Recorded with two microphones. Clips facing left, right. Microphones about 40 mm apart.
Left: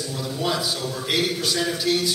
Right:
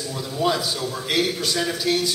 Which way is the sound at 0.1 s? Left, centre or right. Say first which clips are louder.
Right 4 dB; centre.